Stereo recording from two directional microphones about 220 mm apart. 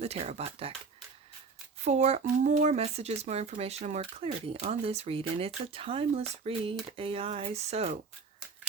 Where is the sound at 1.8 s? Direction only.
30° right (ahead or behind).